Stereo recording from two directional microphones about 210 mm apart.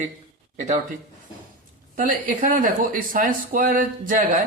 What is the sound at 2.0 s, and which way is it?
Speech, 40° right (ahead or behind).